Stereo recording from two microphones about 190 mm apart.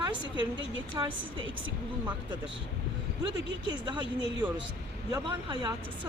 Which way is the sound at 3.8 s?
25° right (ahead or behind).